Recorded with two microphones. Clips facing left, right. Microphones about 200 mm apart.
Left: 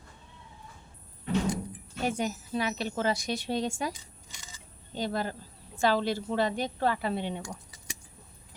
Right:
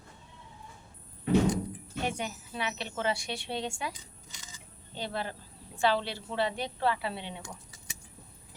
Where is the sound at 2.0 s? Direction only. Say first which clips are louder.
Left 4 dB; 40° left (ahead or behind).